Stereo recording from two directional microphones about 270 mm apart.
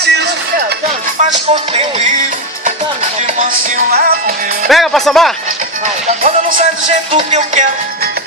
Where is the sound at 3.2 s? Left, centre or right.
Right.